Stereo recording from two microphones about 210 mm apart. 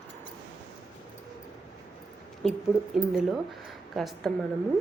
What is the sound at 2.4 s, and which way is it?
Speech, centre (ahead or behind).